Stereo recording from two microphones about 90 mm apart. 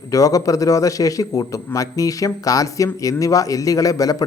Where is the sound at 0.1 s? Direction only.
40° left (ahead or behind).